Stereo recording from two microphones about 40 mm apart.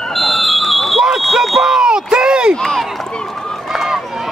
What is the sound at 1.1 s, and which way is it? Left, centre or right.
Smoke detector, centre.